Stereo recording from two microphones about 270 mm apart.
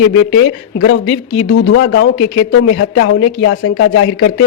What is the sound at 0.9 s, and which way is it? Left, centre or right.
Speech, left.